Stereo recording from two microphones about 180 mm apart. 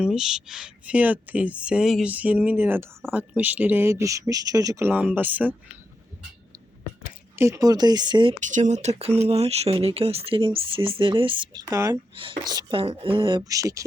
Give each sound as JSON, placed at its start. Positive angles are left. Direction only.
{"t": 0.0, "sound": "speech", "side_deg": 0}
{"t": 7.0, "sound": "speech", "side_deg": -15}
{"t": 8.4, "sound": "speech", "side_deg": -45}
{"t": 12.1, "sound": "speech", "side_deg": -30}